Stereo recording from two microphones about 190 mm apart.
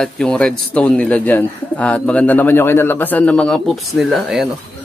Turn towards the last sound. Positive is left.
turn(degrees=0)  # may be behind; listen again after turning